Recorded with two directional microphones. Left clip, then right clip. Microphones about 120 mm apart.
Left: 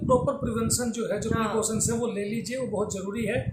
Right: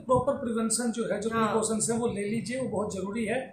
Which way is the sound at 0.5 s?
25° left (ahead or behind).